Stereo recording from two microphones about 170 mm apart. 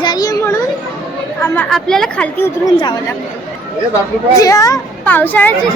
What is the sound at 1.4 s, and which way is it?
A woman's voice, 10° left (ahead or behind).